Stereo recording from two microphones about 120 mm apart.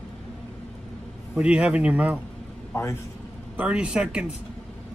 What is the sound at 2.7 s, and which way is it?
Speech, 25° left (ahead or behind).